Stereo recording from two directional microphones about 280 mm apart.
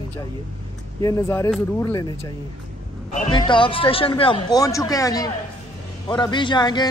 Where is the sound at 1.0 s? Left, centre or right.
Centre.